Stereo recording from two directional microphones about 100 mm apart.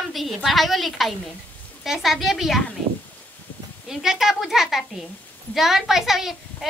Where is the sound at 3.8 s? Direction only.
5° right (ahead or behind).